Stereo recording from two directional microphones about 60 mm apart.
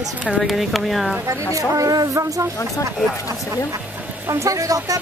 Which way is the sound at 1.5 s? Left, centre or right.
Right.